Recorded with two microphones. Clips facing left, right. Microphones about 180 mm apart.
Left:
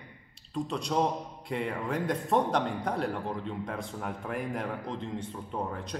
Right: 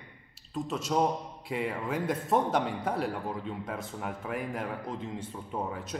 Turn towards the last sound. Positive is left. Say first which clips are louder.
# even
turn(degrees=-5)  # may be behind; listen again after turning